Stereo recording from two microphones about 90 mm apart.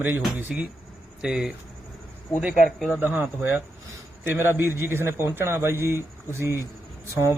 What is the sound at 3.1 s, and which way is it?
A man's voice, 20° right (ahead or behind).